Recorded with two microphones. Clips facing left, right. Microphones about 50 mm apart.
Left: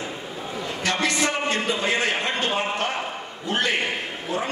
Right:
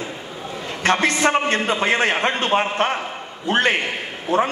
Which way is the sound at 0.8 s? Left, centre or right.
Right.